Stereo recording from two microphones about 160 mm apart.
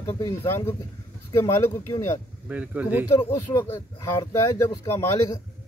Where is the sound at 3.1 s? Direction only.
20° left (ahead or behind).